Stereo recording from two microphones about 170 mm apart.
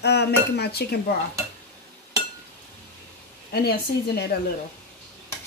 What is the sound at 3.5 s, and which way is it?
Dishes, 65° left (ahead or behind).